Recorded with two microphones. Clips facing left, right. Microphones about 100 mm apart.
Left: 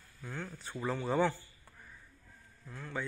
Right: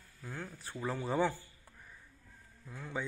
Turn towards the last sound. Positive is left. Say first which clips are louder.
# even
turn(degrees=-15)  # may be behind; listen again after turning